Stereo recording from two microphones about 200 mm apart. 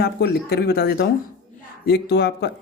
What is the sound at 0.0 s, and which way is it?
A man's voice, 50° left (ahead or behind).